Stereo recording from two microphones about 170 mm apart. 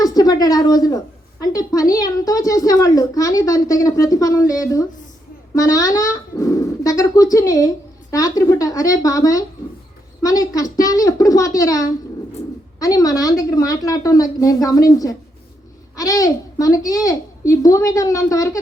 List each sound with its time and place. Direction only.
0.0 s a woman's voice: 20° left (ahead or behind)